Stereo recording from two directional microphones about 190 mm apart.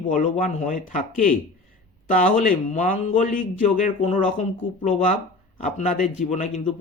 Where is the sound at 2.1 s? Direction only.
40° left (ahead or behind).